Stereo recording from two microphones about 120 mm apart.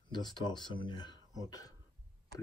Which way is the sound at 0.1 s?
35° left (ahead or behind).